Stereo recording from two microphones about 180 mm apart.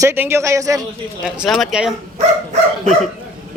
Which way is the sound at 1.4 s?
Centre (ahead or behind).